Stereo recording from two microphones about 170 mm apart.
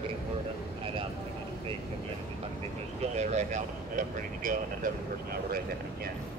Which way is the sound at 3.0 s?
40° right (ahead or behind).